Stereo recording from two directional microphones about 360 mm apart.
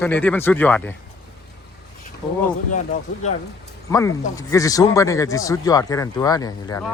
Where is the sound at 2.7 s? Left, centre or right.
Left.